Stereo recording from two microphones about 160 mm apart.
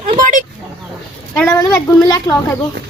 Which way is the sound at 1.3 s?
15° left (ahead or behind).